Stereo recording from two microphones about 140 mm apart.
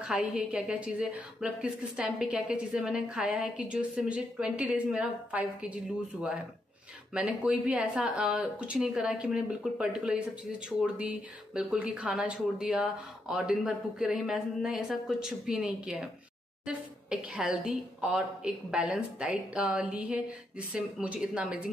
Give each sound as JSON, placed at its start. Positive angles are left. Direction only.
{"t": 0.0, "sound": "a woman's voice", "side_deg": -10}
{"t": 7.2, "sound": "a woman's voice", "side_deg": -10}